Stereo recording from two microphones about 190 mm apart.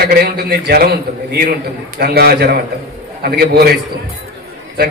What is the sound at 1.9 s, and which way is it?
A man's voice, 55° right (ahead or behind).